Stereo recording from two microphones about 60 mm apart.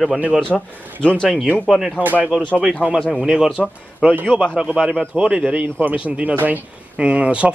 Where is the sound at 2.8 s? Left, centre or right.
Left.